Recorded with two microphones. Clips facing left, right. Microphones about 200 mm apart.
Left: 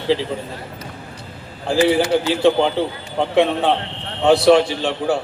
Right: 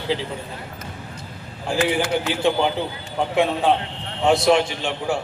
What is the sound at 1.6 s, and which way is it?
A man's voice, 35° left (ahead or behind).